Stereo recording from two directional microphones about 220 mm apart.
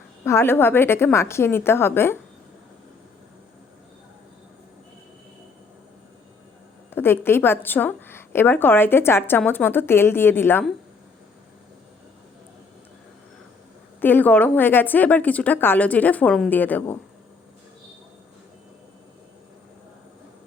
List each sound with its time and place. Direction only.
0.3 s a woman's voice: 10° left (ahead or behind)
6.9 s a woman's voice: 10° left (ahead or behind)
14.0 s a woman's voice: 10° left (ahead or behind)